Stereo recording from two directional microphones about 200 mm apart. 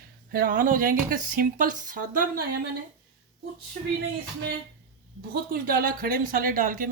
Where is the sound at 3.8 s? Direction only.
50° right (ahead or behind).